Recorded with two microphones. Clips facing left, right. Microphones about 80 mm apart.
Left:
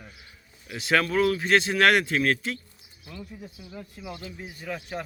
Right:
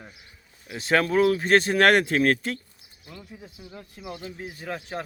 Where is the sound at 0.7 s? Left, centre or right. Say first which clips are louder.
Right 2 dB; right.